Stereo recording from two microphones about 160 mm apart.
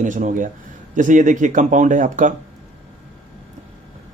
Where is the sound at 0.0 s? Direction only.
55° right (ahead or behind).